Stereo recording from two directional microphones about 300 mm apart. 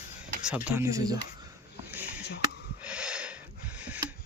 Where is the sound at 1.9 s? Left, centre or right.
Centre.